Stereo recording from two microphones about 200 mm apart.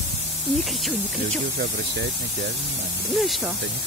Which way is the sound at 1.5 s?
60° right (ahead or behind).